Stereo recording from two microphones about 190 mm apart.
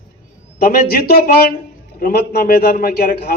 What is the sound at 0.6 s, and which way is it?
A man's voice, 50° left (ahead or behind).